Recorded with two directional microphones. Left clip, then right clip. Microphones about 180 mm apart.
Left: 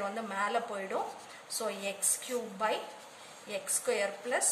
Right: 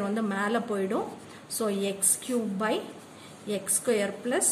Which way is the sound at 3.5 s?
20° right (ahead or behind).